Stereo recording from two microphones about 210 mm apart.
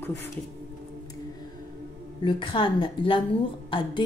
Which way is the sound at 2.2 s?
25° left (ahead or behind).